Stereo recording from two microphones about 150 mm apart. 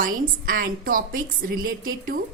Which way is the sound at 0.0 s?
70° right (ahead or behind).